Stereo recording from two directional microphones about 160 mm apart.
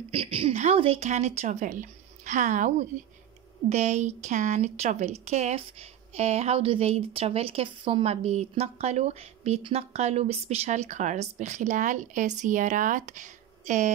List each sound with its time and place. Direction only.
0.1 s a woman's voice: 35° right (ahead or behind)